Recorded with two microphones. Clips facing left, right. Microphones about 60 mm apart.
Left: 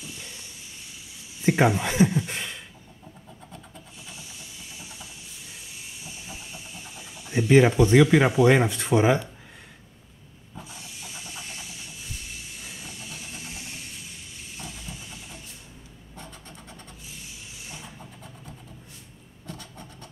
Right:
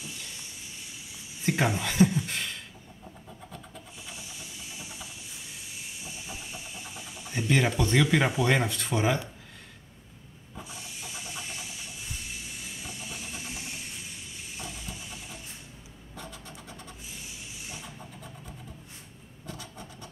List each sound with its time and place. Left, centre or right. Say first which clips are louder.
1.4 s a sound: left 6 dB; left
7.2 s speech: left 8 dB; centre
10.7 s a sound: right 2 dB; centre
14.6 s vehicle: left 1 dB; centre
16.4 s vehicle: right 1 dB; centre
19.4 s scratch: left 1 dB; centre